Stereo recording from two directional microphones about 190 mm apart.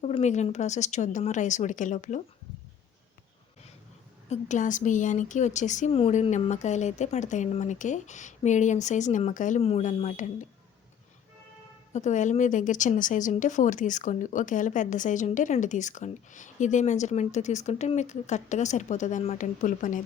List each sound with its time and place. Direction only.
0.0 s speech: 35° left (ahead or behind)
4.3 s speech: 40° left (ahead or behind)
11.9 s speech: 40° left (ahead or behind)